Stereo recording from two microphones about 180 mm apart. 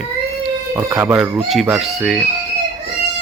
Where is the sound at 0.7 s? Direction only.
15° right (ahead or behind); by 2.1 s centre (ahead or behind).